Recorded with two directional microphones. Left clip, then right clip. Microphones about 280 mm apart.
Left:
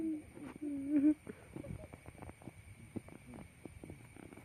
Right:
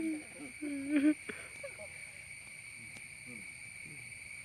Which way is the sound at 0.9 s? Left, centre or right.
Centre.